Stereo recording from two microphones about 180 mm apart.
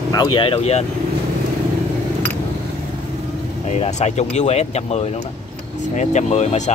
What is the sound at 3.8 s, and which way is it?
Speech, 40° left (ahead or behind).